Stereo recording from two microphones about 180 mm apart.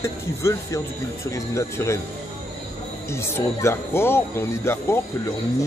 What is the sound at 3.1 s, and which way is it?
Speech, 15° left (ahead or behind).